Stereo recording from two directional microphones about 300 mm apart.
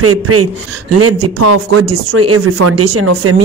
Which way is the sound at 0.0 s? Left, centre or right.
Right.